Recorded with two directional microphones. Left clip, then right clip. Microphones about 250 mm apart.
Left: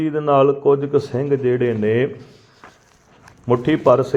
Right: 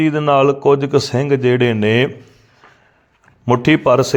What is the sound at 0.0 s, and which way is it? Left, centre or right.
A man's voice, right.